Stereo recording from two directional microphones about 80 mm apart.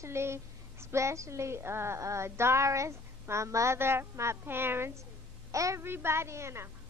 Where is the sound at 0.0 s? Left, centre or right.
Right.